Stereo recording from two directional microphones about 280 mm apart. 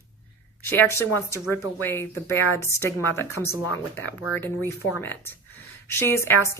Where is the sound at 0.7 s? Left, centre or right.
Centre.